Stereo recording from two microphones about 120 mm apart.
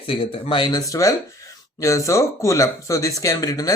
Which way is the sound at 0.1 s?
45° left (ahead or behind).